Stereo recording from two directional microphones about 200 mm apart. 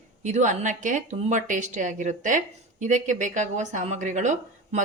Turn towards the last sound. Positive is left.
turn(degrees=-35)  # may be behind; listen again after turning